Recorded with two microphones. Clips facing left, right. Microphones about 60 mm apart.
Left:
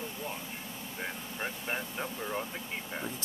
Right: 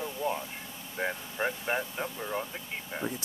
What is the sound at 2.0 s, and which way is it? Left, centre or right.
Speech, centre.